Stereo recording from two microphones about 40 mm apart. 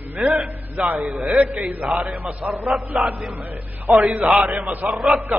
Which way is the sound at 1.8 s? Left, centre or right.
Centre.